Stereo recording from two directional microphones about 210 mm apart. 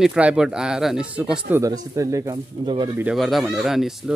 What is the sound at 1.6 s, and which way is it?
Speech, 15° right (ahead or behind).